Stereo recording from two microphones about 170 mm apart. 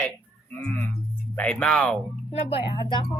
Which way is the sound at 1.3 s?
5° left (ahead or behind).